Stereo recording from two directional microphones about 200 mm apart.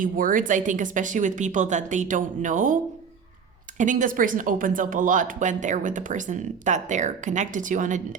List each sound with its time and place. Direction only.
0.0 s speech: 45° right (ahead or behind)
3.8 s speech: 40° right (ahead or behind)